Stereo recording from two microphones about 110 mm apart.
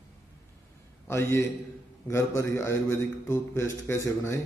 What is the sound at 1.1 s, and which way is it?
Mantra, 25° left (ahead or behind).